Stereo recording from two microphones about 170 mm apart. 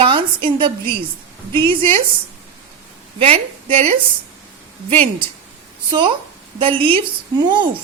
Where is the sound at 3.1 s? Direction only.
35° right (ahead or behind).